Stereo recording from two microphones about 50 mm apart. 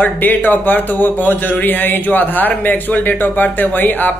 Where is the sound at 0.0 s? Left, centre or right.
Left.